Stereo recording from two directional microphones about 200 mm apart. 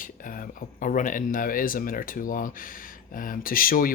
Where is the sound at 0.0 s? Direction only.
45° left (ahead or behind).